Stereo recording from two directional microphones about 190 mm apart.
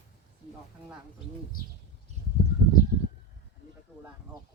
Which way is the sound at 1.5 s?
45° left (ahead or behind).